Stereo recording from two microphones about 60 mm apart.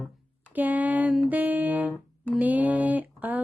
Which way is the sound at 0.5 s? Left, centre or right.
Right.